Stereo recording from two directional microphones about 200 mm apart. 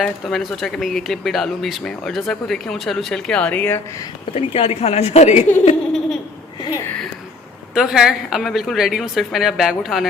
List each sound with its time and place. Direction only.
0.0 s speech: centre (ahead or behind)
4.3 s a woman's voice: 30° left (ahead or behind)
6.7 s a sound: 10° left (ahead or behind)
7.7 s speech: centre (ahead or behind)